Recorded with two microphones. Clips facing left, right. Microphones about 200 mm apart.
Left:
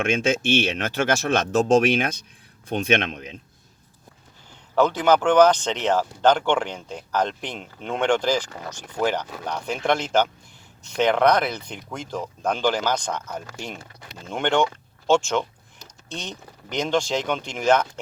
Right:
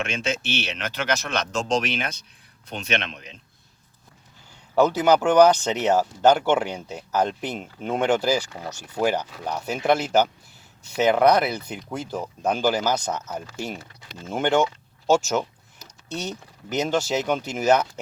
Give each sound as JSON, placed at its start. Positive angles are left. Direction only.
{"t": 0.1, "sound": "speech", "side_deg": 50}
{"t": 4.7, "sound": "speech", "side_deg": -10}